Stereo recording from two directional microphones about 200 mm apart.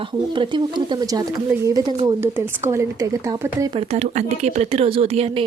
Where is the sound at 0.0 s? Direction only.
25° right (ahead or behind).